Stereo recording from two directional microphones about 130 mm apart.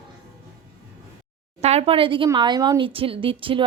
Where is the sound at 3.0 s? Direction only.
45° right (ahead or behind).